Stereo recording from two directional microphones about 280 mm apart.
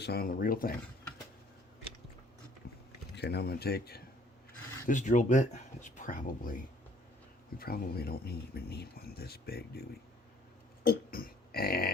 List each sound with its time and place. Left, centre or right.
0.0 s speech: left
3.2 s speech: left
7.6 s speech: left
10.8 s burping: left